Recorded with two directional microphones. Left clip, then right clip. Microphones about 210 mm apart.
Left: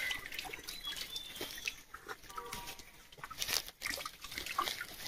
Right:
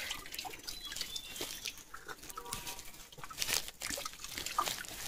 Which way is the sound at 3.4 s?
45° right (ahead or behind).